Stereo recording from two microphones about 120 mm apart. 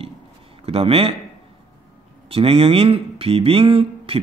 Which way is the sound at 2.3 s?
55° right (ahead or behind).